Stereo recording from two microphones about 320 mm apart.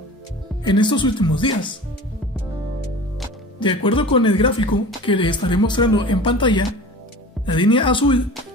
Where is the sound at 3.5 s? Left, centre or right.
Centre.